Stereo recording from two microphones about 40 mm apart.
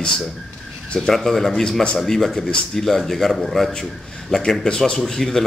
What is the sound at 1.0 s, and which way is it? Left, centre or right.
Speech, centre.